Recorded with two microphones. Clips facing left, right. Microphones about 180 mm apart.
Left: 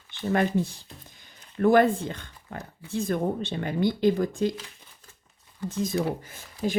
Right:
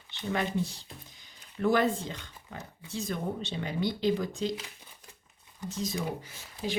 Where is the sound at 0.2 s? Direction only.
55° left (ahead or behind).